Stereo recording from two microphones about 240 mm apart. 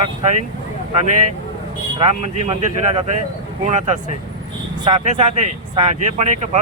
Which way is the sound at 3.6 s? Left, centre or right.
Right.